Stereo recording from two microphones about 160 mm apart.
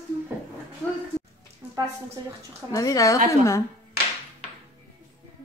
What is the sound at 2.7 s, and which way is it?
Speech, 20° left (ahead or behind).